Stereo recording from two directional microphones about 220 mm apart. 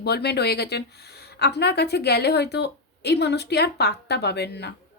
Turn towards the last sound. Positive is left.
turn(degrees=50)  # may be behind; listen again after turning